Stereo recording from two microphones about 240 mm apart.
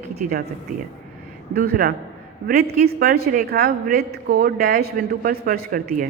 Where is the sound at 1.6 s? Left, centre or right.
Right.